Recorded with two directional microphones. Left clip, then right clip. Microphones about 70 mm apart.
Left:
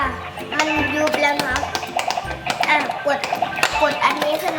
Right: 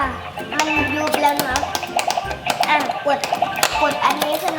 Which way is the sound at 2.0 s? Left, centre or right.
Right.